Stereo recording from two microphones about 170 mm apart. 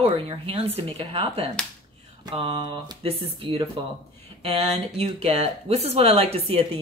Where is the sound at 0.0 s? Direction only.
35° right (ahead or behind).